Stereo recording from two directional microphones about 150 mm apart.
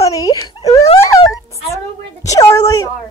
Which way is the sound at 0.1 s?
25° left (ahead or behind).